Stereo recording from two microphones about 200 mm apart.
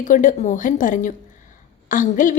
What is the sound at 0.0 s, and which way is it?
A woman's voice, 40° left (ahead or behind).